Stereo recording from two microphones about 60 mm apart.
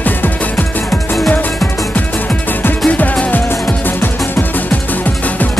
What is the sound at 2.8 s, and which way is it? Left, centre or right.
Music, left.